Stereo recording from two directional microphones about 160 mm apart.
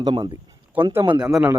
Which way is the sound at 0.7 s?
10° right (ahead or behind).